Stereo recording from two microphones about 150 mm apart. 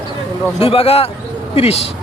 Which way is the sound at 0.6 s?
40° left (ahead or behind).